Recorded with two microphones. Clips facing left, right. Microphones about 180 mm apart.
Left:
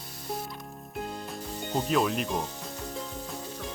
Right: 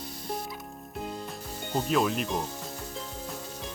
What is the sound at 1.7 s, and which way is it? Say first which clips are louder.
Speech: even; centre (ahead or behind).